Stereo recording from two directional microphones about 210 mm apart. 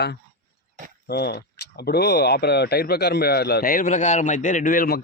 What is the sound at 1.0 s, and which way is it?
Speech, 50° left (ahead or behind).